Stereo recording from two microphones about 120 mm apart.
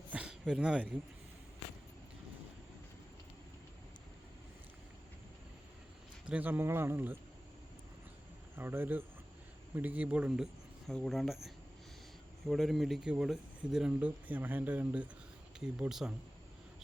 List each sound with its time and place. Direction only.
0.1 s a sound: 10° right (ahead or behind)
0.4 s speech: 5° right (ahead or behind)
6.2 s speech: 15° right (ahead or behind)
8.5 s speech: 20° right (ahead or behind)